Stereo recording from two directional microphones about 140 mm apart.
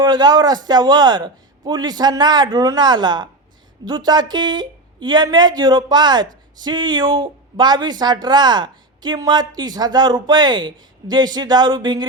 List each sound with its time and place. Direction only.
0.0 s a woman's voice: 30° right (ahead or behind)